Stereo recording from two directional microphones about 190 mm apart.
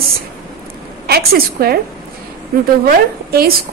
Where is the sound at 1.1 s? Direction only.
55° right (ahead or behind).